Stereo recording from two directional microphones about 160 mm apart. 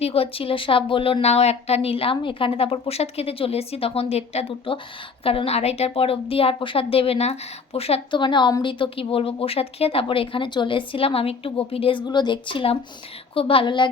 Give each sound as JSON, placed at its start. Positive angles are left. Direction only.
{"t": 0.0, "sound": "a woman's voice", "side_deg": 35}